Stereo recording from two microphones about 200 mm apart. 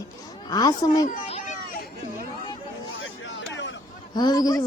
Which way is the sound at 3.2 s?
70° left (ahead or behind).